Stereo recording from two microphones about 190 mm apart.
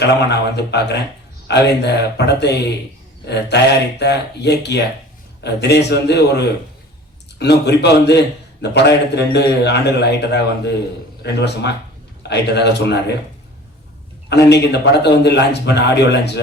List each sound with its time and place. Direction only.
0.0 s a man's voice: 60° left (ahead or behind)
14.3 s a man's voice: 60° left (ahead or behind)